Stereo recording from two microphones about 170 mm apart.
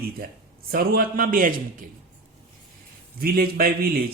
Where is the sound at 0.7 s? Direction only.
60° right (ahead or behind).